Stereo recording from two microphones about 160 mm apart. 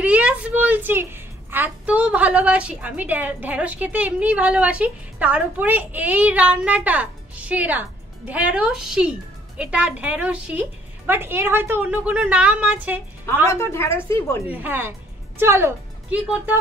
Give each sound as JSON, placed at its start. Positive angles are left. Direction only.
{"t": 0.0, "sound": "a woman's voice", "side_deg": -10}
{"t": 13.5, "sound": "a woman's voice", "side_deg": 15}
{"t": 14.4, "sound": "a woman's voice", "side_deg": -10}